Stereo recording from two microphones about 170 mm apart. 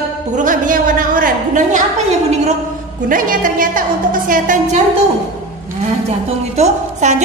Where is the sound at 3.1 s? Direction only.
55° right (ahead or behind).